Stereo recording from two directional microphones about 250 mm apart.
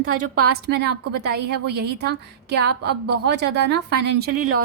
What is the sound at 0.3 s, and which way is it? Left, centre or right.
A woman's voice, right.